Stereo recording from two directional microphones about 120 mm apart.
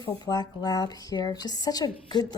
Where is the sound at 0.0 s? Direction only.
35° left (ahead or behind).